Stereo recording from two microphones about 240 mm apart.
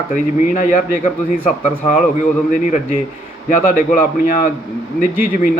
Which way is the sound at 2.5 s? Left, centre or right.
Left.